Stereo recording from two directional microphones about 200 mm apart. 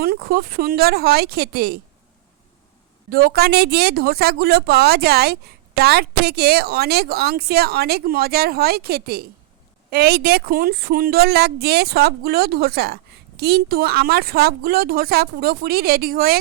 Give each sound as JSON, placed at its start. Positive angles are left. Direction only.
{"t": 0.0, "sound": "speech", "side_deg": -50}
{"t": 3.1, "sound": "speech", "side_deg": -50}